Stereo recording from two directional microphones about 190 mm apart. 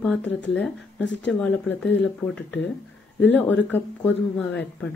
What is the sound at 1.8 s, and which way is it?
Speech, 70° left (ahead or behind).